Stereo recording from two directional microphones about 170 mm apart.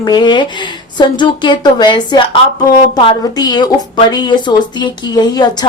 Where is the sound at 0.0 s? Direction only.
25° left (ahead or behind).